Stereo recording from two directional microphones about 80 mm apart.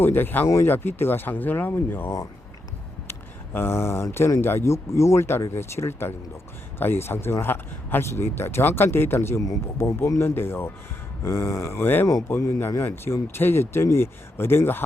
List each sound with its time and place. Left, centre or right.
0.0 s speech: left